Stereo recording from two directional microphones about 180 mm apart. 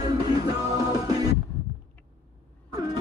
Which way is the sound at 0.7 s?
20° right (ahead or behind).